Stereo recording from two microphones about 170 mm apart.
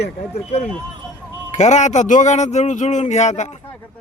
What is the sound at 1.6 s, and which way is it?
A man's voice, 45° left (ahead or behind).